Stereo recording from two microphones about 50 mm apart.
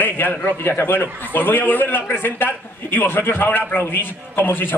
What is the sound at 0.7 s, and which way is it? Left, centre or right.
A man's voice, left.